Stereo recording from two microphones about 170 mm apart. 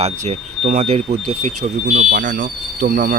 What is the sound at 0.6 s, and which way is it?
Speech, 50° right (ahead or behind).